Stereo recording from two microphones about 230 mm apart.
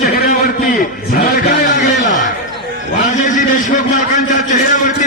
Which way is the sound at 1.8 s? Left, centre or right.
Left.